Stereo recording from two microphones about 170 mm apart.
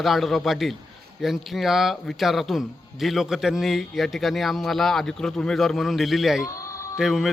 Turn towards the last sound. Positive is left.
turn(degrees=0)  # may be behind; listen again after turning